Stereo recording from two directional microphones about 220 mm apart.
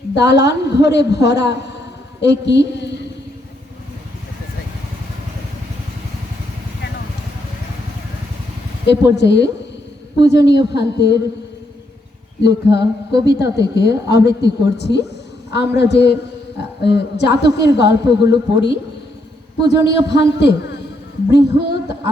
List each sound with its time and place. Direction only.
0.1 s a woman's voice: 50° left (ahead or behind)
9.1 s a woman's voice: 50° left (ahead or behind)
12.4 s a woman's voice: 50° left (ahead or behind)